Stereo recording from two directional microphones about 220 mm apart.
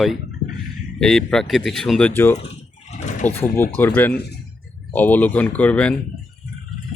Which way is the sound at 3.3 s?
10° left (ahead or behind).